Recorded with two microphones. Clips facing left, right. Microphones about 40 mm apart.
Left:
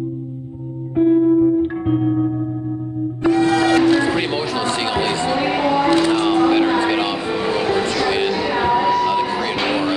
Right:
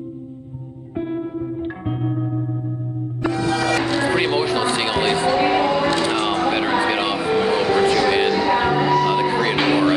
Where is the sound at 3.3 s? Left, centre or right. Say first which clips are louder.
Left 6 dB; left.